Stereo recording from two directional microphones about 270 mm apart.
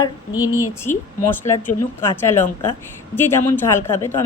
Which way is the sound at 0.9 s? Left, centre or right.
Left.